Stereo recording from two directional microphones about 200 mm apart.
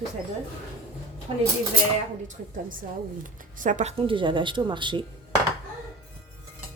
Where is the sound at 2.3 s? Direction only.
40° right (ahead or behind); by 5.1 s 25° right (ahead or behind).